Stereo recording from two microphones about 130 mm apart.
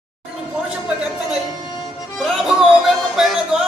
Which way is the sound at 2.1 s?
Centre (ahead or behind).